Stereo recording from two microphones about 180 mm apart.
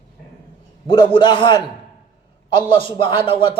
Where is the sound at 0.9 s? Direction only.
30° left (ahead or behind).